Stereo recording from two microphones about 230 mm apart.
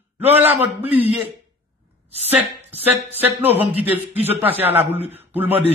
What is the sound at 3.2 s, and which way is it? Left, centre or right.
A man's voice, centre.